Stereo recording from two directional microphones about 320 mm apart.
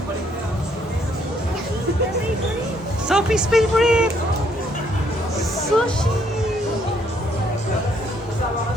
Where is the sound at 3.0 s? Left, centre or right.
Centre.